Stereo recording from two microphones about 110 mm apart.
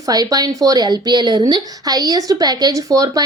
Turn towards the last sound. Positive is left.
turn(degrees=-30)  # may be behind; listen again after turning